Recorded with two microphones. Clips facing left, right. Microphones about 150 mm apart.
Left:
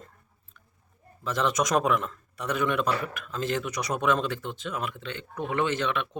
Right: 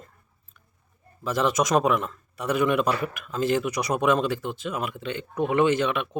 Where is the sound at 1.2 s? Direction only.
5° right (ahead or behind).